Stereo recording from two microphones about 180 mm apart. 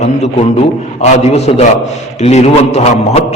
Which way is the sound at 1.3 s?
35° left (ahead or behind).